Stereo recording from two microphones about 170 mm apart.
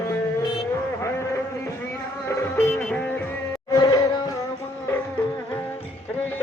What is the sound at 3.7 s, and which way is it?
Music, 20° left (ahead or behind).